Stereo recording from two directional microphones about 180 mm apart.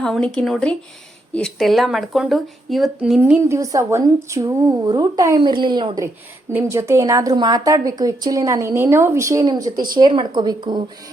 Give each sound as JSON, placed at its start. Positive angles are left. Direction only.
{"t": 0.0, "sound": "speech", "side_deg": 5}
{"t": 6.5, "sound": "a woman's voice", "side_deg": -15}